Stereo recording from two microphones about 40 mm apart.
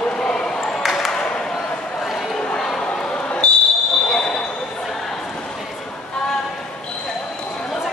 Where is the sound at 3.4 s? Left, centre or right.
Left.